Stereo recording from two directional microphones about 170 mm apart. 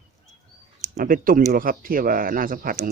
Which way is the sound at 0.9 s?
55° right (ahead or behind).